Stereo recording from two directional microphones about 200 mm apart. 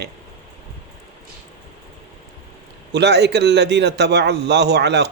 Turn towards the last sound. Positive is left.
turn(degrees=-55)  # may be behind; listen again after turning